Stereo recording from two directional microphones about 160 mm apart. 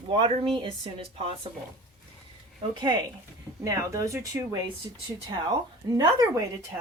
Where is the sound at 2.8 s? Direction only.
25° right (ahead or behind).